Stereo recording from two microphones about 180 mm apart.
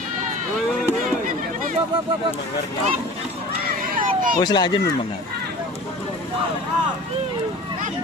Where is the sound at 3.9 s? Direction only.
50° right (ahead or behind).